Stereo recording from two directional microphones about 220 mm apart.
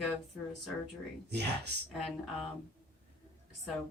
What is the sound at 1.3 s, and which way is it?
Speech, 50° right (ahead or behind).